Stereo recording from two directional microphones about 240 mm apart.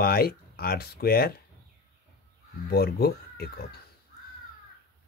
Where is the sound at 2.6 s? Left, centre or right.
Left.